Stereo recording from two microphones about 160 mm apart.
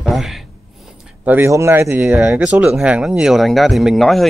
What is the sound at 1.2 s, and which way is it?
Speech, 15° right (ahead or behind).